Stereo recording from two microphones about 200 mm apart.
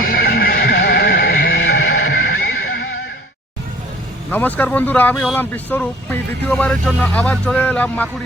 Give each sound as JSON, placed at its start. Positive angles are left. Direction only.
{"t": 0.0, "sound": "music", "side_deg": 45}
{"t": 1.5, "sound": "music", "side_deg": 80}
{"t": 4.3, "sound": "speech", "side_deg": 10}